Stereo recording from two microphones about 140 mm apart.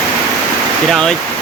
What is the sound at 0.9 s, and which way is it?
Speech, 5° left (ahead or behind).